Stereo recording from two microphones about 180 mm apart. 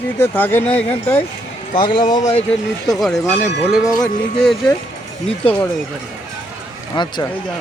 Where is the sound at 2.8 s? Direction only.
Centre (ahead or behind).